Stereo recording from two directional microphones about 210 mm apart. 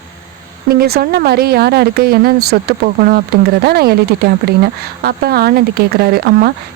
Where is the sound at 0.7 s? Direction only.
50° right (ahead or behind).